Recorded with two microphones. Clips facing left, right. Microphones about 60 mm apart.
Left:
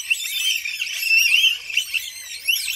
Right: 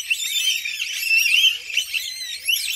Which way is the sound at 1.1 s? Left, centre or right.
Left.